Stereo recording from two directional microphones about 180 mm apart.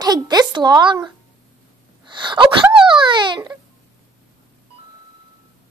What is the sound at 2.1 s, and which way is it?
Wail, 25° right (ahead or behind).